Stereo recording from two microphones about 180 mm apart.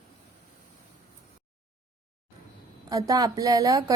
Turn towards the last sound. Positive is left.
turn(degrees=-20)  # may be behind; listen again after turning